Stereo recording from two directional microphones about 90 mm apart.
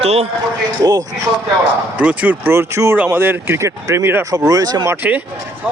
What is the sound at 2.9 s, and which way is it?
Speech, 20° right (ahead or behind).